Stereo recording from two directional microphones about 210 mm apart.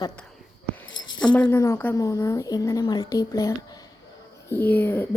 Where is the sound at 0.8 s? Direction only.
65° left (ahead or behind).